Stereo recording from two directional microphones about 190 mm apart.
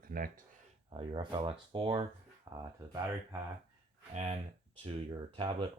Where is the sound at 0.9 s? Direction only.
25° right (ahead or behind).